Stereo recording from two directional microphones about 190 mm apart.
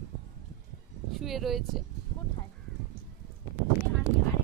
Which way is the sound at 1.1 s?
Centre (ahead or behind).